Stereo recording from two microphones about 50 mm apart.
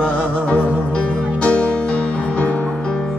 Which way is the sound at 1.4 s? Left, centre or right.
Left.